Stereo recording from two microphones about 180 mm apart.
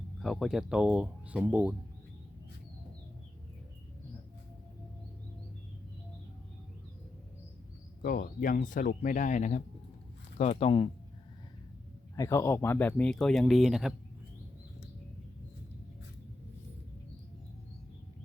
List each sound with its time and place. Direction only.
0.2 s speech: centre (ahead or behind)
8.0 s speech: 50° left (ahead or behind); by 10.8 s 30° left (ahead or behind)
12.1 s speech: 15° left (ahead or behind); by 13.9 s centre (ahead or behind)